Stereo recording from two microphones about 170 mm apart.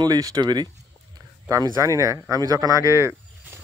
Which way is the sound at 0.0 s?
20° right (ahead or behind).